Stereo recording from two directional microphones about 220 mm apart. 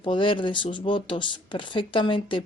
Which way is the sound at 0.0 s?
20° left (ahead or behind).